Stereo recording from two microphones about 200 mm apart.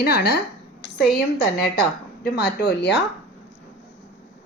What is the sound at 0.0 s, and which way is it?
Speech, 55° left (ahead or behind).